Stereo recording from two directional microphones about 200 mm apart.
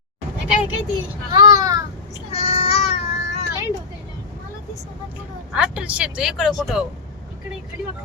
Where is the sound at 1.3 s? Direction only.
20° right (ahead or behind).